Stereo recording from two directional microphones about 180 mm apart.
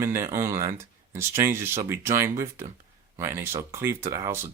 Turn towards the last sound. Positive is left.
turn(degrees=-15)  # may be behind; listen again after turning